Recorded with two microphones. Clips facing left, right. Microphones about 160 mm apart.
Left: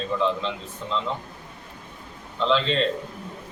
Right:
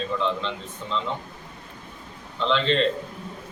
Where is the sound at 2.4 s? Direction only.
Centre (ahead or behind).